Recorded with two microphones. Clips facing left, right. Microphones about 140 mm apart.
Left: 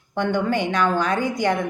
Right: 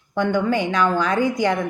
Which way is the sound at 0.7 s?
50° left (ahead or behind).